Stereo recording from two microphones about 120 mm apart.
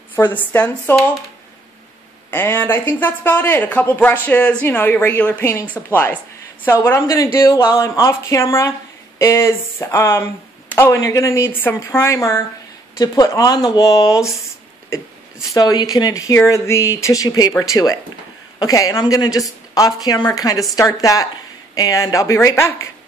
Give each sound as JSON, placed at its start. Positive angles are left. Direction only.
{"t": 0.1, "sound": "speech", "side_deg": 15}
{"t": 2.3, "sound": "a woman's voice", "side_deg": 15}
{"t": 15.5, "sound": "a woman's voice", "side_deg": 35}